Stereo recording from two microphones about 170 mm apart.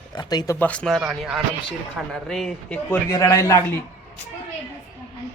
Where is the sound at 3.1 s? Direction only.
20° left (ahead or behind).